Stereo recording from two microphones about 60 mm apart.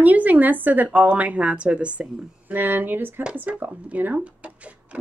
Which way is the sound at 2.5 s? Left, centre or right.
Right.